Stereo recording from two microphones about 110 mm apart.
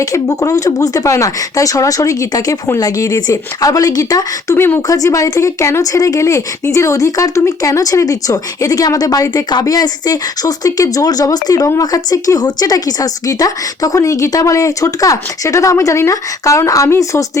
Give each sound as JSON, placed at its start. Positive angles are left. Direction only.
{"t": 0.0, "sound": "speech", "side_deg": 30}